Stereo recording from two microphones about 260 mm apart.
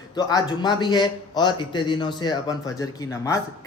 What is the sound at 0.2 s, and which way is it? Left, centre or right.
A man's voice, centre.